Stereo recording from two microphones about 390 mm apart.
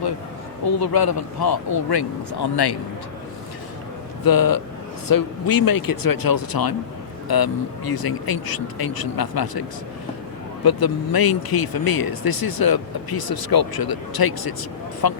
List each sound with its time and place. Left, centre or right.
0.8 s a man's voice: left
4.2 s speech: left